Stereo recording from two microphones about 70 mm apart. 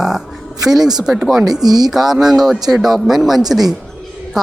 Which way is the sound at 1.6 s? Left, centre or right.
Right.